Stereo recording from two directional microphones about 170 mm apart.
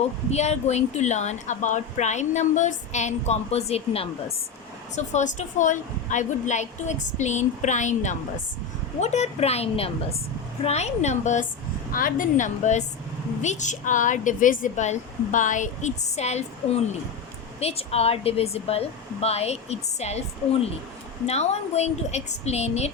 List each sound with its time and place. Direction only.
0.3 s a woman's voice: 40° left (ahead or behind)